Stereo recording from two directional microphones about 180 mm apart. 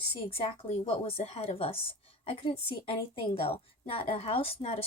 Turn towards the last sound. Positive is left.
turn(degrees=30)  # may be behind; listen again after turning